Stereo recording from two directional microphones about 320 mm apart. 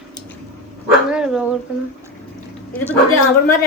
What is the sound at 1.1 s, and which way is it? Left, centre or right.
Dog, centre.